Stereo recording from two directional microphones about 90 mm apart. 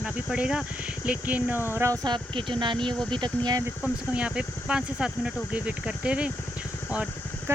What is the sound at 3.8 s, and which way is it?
Speech, 10° right (ahead or behind).